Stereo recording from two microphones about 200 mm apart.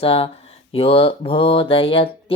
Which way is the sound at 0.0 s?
30° left (ahead or behind).